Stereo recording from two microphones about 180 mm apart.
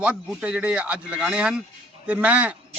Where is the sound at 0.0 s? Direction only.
5° right (ahead or behind).